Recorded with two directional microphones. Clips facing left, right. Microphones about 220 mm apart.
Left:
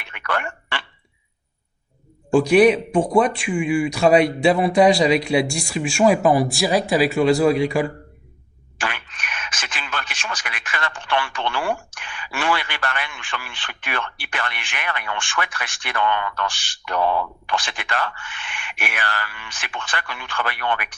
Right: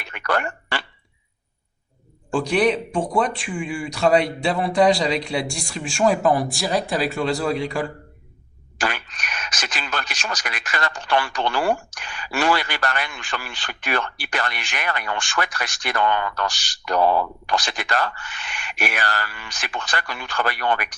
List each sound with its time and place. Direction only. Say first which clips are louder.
0.0 s a sound: right 3 dB; 40° right (ahead or behind)
2.3 s speech: left 6 dB; 10° left (ahead or behind)
8.8 s speech: right 3 dB; 40° right (ahead or behind)